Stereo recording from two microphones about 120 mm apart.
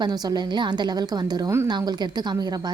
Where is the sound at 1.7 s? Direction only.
35° right (ahead or behind).